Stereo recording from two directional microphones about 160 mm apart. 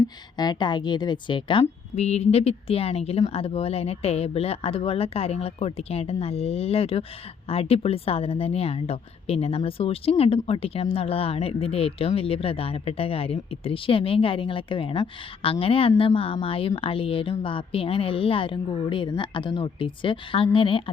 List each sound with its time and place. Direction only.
0.3 s a woman's voice: 25° left (ahead or behind)